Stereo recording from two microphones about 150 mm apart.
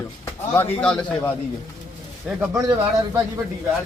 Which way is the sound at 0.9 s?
5° left (ahead or behind).